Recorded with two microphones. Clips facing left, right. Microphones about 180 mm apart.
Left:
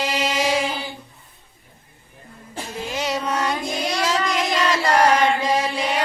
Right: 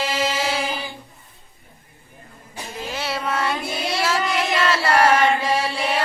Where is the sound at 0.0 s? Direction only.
15° left (ahead or behind).